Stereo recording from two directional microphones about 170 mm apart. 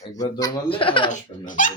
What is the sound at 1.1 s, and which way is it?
Speech, 50° left (ahead or behind).